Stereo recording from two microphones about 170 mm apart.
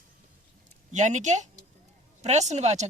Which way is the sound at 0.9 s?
45° right (ahead or behind).